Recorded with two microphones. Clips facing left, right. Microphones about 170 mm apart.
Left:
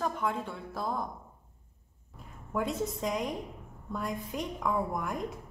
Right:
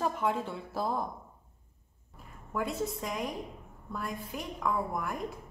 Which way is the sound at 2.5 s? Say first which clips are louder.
Left 1 dB; 20° left (ahead or behind).